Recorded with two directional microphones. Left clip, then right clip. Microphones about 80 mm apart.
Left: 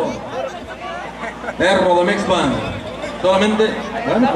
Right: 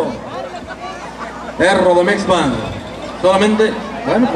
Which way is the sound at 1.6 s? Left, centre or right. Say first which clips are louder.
Right 3 dB; right.